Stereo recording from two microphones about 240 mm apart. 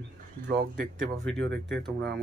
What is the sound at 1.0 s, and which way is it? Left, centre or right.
Speech, centre.